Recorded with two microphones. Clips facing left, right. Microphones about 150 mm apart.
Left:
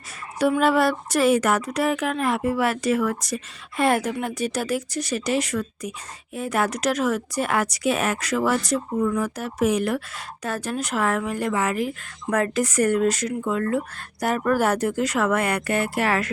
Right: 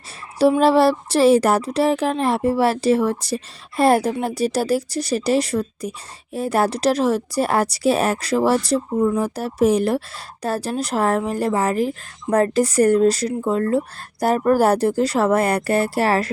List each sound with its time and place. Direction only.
0.3 s speech: 30° right (ahead or behind)